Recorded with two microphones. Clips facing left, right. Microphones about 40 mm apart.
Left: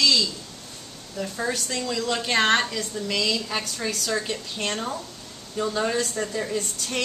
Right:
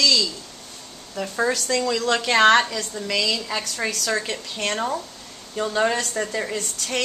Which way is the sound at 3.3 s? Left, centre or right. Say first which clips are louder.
Right 1 dB; right.